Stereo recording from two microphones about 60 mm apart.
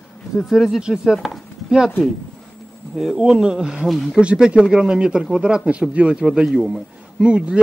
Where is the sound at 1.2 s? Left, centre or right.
Centre.